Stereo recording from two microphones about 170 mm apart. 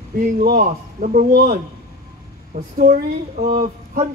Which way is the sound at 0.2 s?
50° right (ahead or behind).